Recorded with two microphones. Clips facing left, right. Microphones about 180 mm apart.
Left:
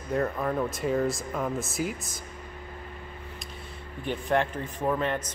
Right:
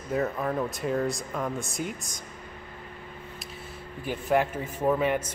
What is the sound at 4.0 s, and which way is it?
A man's voice, 5° right (ahead or behind).